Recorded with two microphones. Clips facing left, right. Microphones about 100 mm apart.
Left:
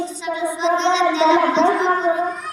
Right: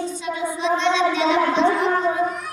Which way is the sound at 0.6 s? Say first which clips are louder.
Left 2 dB; 25° left (ahead or behind).